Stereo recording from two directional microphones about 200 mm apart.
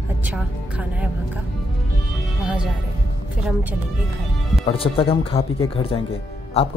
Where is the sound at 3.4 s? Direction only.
10° right (ahead or behind).